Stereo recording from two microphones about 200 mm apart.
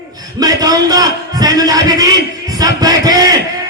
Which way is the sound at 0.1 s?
20° right (ahead or behind).